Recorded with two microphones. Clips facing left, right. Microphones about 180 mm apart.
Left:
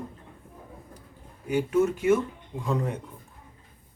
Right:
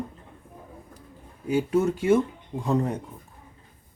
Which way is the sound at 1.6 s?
30° right (ahead or behind).